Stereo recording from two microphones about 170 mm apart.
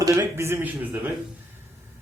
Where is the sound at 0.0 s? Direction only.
20° right (ahead or behind).